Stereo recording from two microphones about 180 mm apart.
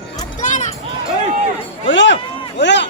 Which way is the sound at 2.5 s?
75° left (ahead or behind).